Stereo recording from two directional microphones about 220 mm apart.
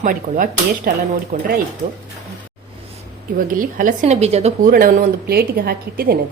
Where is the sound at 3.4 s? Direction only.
40° right (ahead or behind).